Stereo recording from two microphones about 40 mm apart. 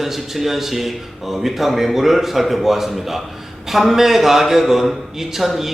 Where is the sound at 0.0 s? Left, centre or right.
Centre.